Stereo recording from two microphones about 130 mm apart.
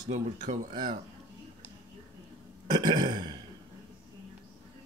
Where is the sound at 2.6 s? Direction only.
35° right (ahead or behind).